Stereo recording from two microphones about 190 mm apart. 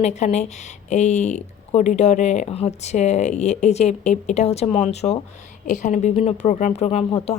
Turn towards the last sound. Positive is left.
turn(degrees=35)  # may be behind; listen again after turning